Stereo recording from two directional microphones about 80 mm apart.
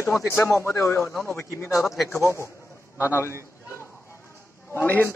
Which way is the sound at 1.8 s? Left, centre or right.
Centre.